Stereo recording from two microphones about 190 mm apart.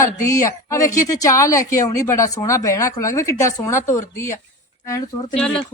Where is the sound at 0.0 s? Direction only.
15° left (ahead or behind).